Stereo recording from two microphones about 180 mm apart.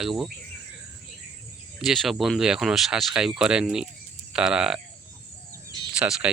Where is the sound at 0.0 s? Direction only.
Centre (ahead or behind).